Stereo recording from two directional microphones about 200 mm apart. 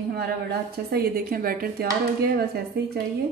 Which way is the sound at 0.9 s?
45° right (ahead or behind).